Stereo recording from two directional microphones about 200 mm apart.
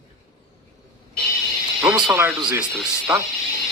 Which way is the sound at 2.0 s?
20° right (ahead or behind).